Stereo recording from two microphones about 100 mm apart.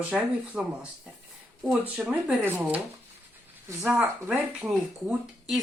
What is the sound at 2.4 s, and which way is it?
Speech, 20° right (ahead or behind).